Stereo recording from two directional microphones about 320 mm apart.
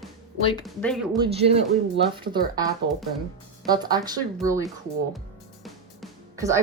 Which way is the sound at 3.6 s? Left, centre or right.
Centre.